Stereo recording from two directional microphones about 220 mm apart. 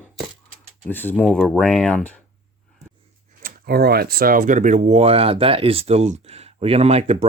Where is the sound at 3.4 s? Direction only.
45° right (ahead or behind); by 7.2 s 30° right (ahead or behind).